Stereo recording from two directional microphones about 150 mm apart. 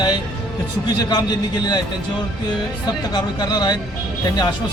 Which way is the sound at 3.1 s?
30° left (ahead or behind).